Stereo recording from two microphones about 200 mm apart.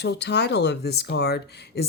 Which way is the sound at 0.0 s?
55° left (ahead or behind).